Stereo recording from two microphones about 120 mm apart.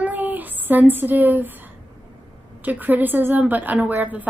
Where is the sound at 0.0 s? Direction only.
15° right (ahead or behind).